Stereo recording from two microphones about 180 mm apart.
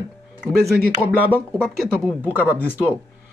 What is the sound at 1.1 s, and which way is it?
Speech, 10° right (ahead or behind).